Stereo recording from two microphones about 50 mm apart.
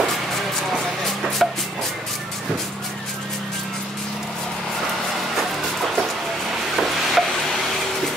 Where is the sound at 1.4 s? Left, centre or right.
Centre.